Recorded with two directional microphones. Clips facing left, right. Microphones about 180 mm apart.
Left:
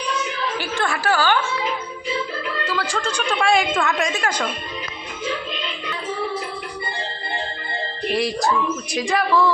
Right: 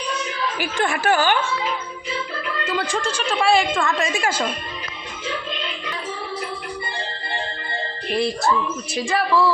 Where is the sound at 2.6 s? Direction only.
20° right (ahead or behind).